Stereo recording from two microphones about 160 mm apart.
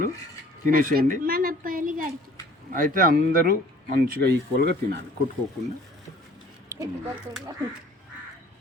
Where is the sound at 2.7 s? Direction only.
60° right (ahead or behind).